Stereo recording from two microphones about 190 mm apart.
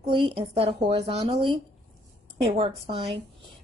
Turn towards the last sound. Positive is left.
turn(degrees=-30)  # may be behind; listen again after turning